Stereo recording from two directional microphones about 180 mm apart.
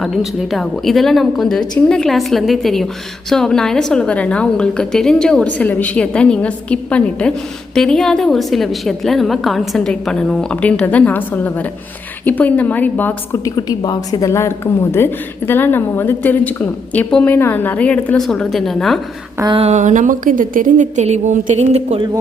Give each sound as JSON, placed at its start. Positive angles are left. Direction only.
{"t": 0.0, "sound": "a woman's voice", "side_deg": 0}
{"t": 13.6, "sound": "a woman's voice", "side_deg": 20}
{"t": 19.4, "sound": "a woman's voice", "side_deg": -30}